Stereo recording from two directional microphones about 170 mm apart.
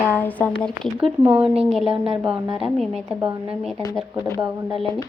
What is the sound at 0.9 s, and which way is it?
Speech, 10° right (ahead or behind).